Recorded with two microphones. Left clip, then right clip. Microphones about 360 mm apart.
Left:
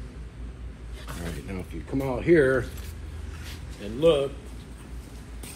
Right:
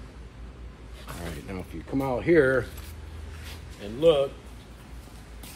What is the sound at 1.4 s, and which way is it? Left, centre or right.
Speech, right.